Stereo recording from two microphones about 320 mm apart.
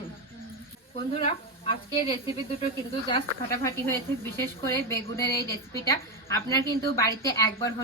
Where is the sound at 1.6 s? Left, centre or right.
Centre.